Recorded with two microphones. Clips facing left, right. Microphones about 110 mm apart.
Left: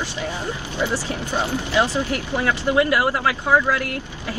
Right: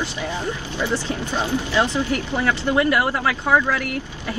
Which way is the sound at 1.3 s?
15° left (ahead or behind).